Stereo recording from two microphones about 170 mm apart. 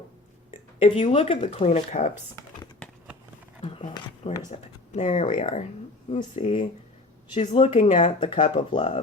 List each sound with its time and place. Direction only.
0.8 s speech: 35° left (ahead or behind)
3.6 s speech: 30° left (ahead or behind)
5.3 s speech: 35° left (ahead or behind)